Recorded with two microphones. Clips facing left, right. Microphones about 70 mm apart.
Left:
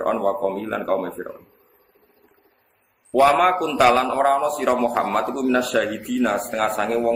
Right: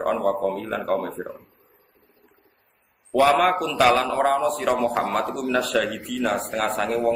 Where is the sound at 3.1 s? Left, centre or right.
Centre.